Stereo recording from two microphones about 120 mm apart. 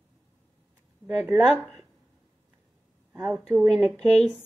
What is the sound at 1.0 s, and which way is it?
Speech, 15° right (ahead or behind).